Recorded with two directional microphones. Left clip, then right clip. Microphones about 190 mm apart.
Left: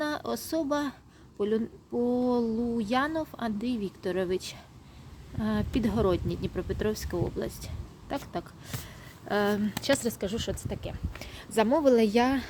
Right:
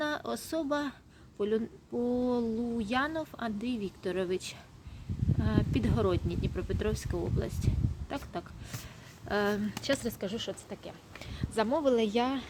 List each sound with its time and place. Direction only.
0.0 s a woman's voice: 10° left (ahead or behind)